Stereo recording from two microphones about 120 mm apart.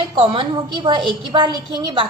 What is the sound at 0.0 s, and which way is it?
A woman's voice, 45° right (ahead or behind).